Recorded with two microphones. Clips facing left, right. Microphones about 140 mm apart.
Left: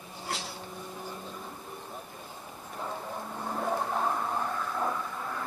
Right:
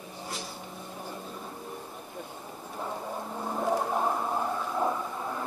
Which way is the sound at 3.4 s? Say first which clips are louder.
Right 3 dB; 10° right (ahead or behind).